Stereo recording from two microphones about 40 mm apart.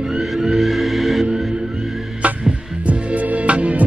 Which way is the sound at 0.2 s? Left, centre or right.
Centre.